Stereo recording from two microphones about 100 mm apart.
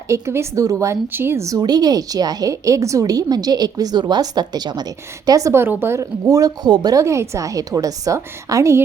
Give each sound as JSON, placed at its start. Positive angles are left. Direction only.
{"t": 0.1, "sound": "a woman's voice", "side_deg": -30}
{"t": 6.2, "sound": "a woman's voice", "side_deg": -40}
{"t": 7.0, "sound": "a woman's voice", "side_deg": -30}